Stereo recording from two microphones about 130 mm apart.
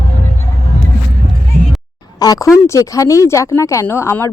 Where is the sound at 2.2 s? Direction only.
25° left (ahead or behind).